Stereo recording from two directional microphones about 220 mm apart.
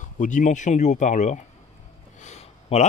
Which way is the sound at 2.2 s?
30° left (ahead or behind).